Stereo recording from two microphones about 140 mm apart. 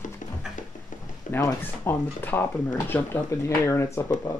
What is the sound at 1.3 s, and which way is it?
Speech, 20° left (ahead or behind).